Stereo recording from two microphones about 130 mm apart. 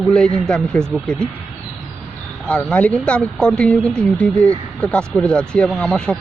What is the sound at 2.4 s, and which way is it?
Speech, 10° left (ahead or behind).